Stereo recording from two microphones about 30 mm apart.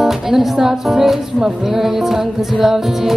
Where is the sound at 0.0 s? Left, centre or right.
Centre.